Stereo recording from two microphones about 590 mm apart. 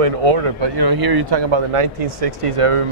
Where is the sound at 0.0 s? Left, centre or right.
Right.